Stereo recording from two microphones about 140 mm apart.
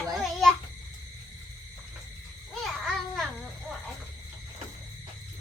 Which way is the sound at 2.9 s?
Centre (ahead or behind).